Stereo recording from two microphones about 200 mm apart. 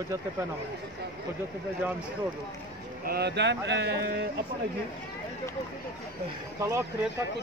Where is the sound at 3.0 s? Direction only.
55° right (ahead or behind).